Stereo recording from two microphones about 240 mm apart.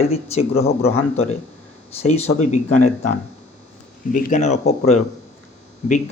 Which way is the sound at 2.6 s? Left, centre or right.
Left.